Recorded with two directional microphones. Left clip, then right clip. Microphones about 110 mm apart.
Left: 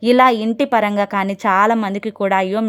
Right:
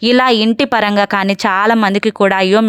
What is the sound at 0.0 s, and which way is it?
A woman's voice, 20° right (ahead or behind).